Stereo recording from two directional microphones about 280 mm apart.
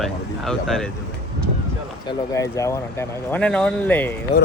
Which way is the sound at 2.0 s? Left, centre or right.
Centre.